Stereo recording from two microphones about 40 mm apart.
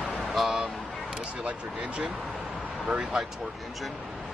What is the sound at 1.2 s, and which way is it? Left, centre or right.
Speech, right.